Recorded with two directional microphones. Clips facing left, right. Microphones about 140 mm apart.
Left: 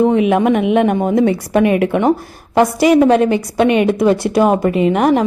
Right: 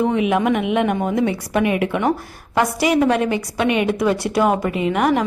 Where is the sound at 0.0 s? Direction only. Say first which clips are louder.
Left 5 dB; 40° left (ahead or behind).